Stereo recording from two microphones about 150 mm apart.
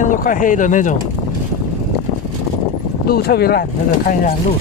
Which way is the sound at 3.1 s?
90° left.